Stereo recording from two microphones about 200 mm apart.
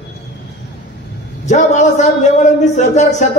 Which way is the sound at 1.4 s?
35° left (ahead or behind).